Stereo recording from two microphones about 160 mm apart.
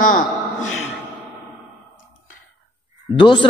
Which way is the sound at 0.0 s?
55° left (ahead or behind).